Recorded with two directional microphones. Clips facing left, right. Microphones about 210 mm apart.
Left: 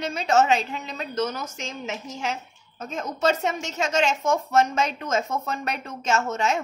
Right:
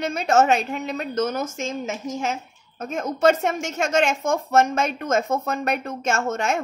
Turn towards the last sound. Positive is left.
turn(degrees=-50)  # may be behind; listen again after turning